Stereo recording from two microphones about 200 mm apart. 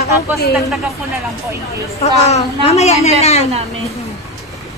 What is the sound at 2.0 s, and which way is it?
A woman's voice, 30° left (ahead or behind).